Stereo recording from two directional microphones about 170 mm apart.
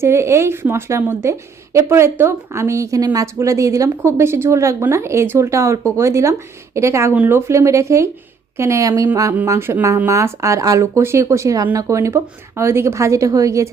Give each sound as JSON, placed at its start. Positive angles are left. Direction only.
{"t": 0.0, "sound": "a woman's voice", "side_deg": -15}